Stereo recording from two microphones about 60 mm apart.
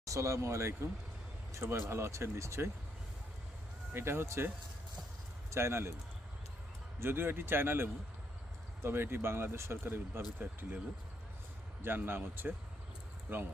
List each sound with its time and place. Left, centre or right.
0.0 s speech: right
3.9 s speech: right
7.0 s speech: right
11.8 s speech: right